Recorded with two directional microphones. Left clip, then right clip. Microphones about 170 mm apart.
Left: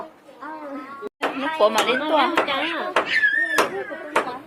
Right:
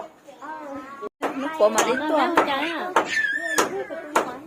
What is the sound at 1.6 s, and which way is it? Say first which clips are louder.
Speech: left 1 dB; 25° right (ahead or behind).